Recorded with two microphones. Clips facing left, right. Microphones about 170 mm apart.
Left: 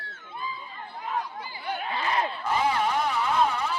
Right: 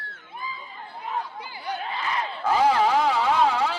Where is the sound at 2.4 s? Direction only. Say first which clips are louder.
Right 8 dB; 90° right.